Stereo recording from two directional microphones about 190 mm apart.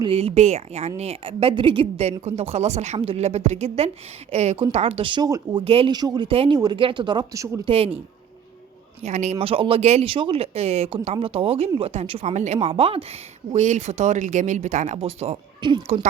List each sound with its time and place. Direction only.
0.0 s a woman's voice: 30° right (ahead or behind)
7.6 s a woman's voice: 30° right (ahead or behind)
9.0 s a woman's voice: 35° right (ahead or behind)